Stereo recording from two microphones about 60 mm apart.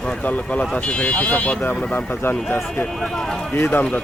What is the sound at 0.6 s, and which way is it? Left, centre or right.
Speech, centre.